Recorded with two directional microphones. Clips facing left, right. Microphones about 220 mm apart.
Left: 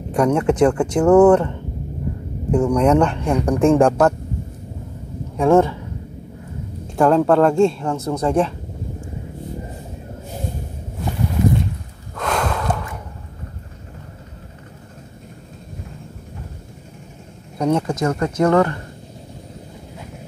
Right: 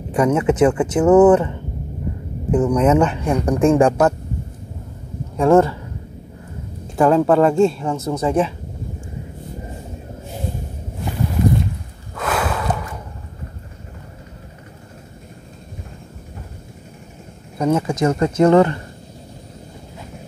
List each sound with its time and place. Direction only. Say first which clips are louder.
0.1 s speech: even; 5° right (ahead or behind)
5.4 s speech: right 1 dB; centre (ahead or behind)
7.0 s speech: even; 5° right (ahead or behind)
12.2 s a sound: even; 5° right (ahead or behind)
17.6 s speech: even; 5° right (ahead or behind)
17.9 s speech: right 3 dB; 20° right (ahead or behind)